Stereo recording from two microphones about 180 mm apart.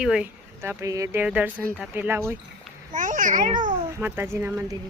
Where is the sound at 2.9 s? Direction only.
45° right (ahead or behind).